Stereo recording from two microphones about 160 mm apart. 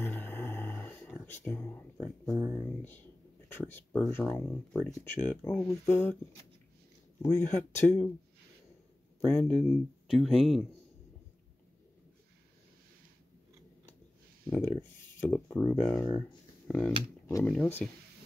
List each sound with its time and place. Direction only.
0.0 s roar: 15° left (ahead or behind)
1.4 s speech: 10° left (ahead or behind)
2.3 s a sound: 20° left (ahead or behind)
3.5 s speech: 15° left (ahead or behind)
7.2 s speech: 15° left (ahead or behind)
9.2 s speech: 10° left (ahead or behind)
14.5 s speech: 10° left (ahead or behind)
16.1 s speech: 25° left (ahead or behind)
16.6 s speech: 5° left (ahead or behind)